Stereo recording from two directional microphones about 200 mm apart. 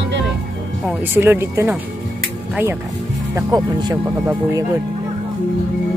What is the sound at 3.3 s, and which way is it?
Speech, 20° right (ahead or behind).